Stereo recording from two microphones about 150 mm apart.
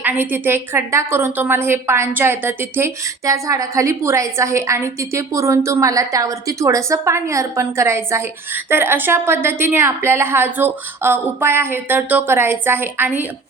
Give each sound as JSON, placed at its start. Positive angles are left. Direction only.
{"t": 0.0, "sound": "a woman's voice", "side_deg": -10}